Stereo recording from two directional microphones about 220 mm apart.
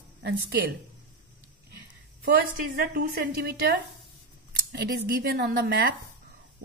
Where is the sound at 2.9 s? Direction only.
45° right (ahead or behind).